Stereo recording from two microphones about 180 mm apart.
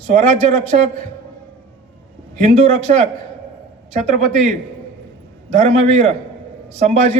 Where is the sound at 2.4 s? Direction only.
40° right (ahead or behind).